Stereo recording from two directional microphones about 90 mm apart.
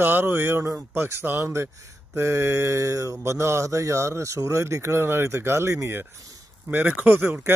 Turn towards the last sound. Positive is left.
turn(degrees=-25)  # may be behind; listen again after turning